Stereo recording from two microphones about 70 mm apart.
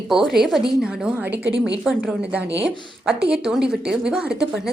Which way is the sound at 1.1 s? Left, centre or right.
Right.